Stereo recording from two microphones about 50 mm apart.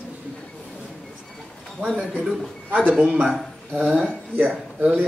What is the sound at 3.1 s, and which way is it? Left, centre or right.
Speech, centre.